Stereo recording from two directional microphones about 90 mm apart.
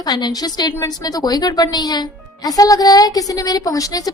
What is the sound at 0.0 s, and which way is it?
Speech, 50° left (ahead or behind).